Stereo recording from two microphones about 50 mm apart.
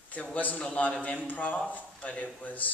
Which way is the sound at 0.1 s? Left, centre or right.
Left.